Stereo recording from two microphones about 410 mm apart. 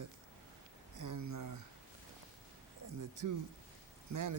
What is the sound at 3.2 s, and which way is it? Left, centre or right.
Speech, right.